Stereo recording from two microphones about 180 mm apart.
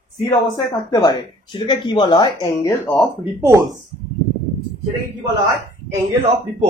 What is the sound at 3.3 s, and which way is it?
Speech, 15° right (ahead or behind).